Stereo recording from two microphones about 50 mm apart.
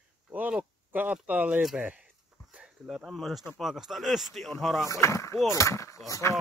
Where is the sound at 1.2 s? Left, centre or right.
Right.